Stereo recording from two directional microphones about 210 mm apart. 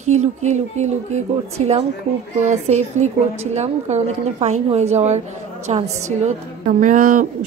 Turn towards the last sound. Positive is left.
turn(degrees=-40)  # may be behind; listen again after turning